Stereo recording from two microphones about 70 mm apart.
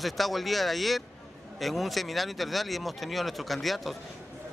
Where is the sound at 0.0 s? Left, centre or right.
Centre.